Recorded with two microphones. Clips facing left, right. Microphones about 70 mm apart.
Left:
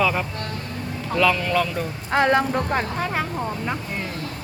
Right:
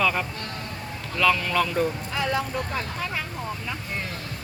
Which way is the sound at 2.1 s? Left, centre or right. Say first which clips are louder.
Left 8 dB; left.